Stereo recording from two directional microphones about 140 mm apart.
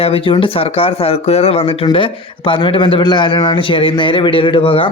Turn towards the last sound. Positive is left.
turn(degrees=40)  # may be behind; listen again after turning